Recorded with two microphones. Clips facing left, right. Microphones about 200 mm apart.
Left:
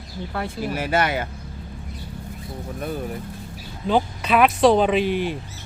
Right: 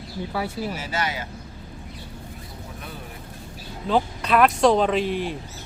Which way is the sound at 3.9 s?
Centre (ahead or behind).